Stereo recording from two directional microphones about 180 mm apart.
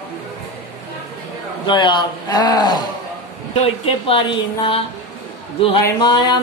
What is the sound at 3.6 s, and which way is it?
Speech, 30° left (ahead or behind).